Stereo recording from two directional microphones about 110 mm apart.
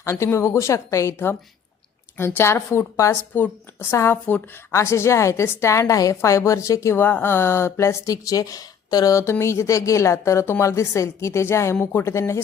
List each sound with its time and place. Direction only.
0.0 s a woman's voice: 25° left (ahead or behind)